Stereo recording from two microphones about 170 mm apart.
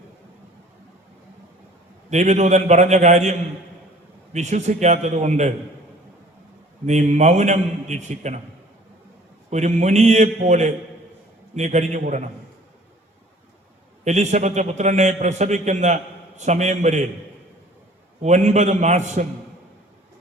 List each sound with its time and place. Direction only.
2.0 s a man's voice: 40° right (ahead or behind)
6.8 s a man's voice: 40° right (ahead or behind)
9.5 s a man's voice: 40° right (ahead or behind)
14.0 s a man's voice: 40° right (ahead or behind)
18.2 s a man's voice: 40° right (ahead or behind)